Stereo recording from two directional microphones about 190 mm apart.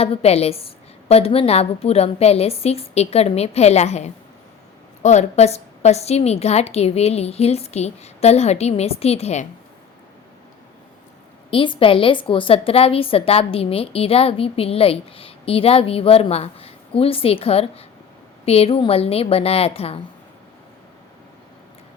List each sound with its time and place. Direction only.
0.0 s a woman's voice: 30° left (ahead or behind)
11.5 s a woman's voice: 25° left (ahead or behind)